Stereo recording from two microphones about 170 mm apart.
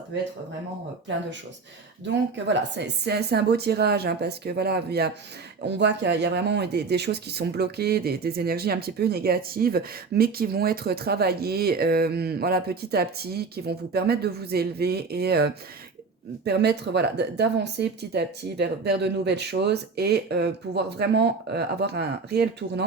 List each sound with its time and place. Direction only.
2.3 s speech: 90° right; by 5.1 s 70° right (ahead or behind)
5.6 s speech: 90° right; by 22.4 s 70° right (ahead or behind)